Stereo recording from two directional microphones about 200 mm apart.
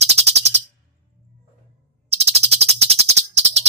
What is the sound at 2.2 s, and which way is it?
Music, 30° right (ahead or behind).